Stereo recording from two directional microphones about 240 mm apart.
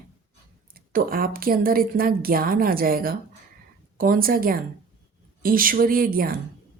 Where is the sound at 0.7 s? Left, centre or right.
Right.